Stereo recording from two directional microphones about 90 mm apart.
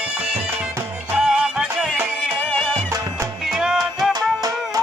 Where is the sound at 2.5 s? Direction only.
10° left (ahead or behind).